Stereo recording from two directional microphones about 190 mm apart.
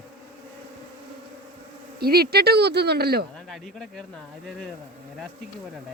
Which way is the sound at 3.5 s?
Centre (ahead or behind).